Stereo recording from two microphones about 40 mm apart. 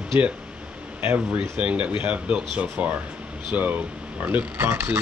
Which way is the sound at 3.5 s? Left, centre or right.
Right.